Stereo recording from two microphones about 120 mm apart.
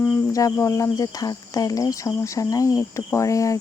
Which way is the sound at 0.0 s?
25° left (ahead or behind).